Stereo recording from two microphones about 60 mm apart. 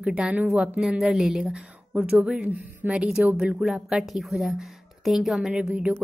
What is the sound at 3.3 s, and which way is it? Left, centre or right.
Speech, centre.